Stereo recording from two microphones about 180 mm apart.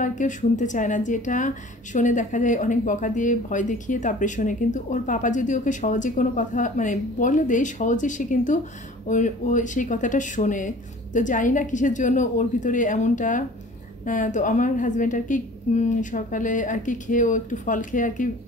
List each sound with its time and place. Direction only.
0.0 s a woman's voice: 45° left (ahead or behind)